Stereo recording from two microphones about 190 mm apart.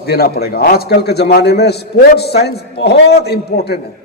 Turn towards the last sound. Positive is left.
turn(degrees=60)  # may be behind; listen again after turning